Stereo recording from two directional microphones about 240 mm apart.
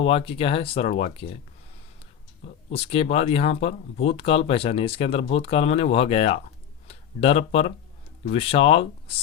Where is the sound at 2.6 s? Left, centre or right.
Left.